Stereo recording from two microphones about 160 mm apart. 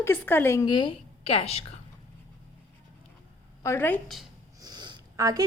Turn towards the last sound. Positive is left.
turn(degrees=-20)  # may be behind; listen again after turning